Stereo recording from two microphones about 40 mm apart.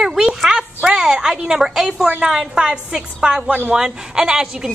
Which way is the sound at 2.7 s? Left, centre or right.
Right.